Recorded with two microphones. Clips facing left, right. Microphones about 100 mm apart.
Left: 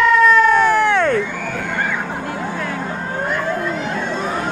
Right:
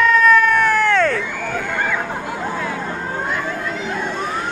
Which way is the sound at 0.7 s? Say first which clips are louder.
Left 1 dB; 15° left (ahead or behind).